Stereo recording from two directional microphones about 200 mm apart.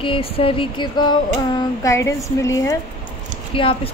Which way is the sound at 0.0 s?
25° left (ahead or behind).